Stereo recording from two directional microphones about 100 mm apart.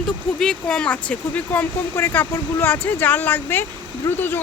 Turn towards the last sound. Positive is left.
turn(degrees=20)  # may be behind; listen again after turning